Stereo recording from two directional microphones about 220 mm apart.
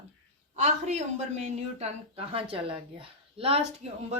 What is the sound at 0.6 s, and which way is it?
A woman's voice, 30° right (ahead or behind).